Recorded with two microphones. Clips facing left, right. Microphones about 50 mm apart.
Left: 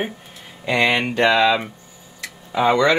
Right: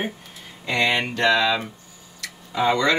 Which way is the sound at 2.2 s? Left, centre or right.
Left.